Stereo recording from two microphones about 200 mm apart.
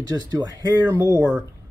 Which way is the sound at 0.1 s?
20° right (ahead or behind).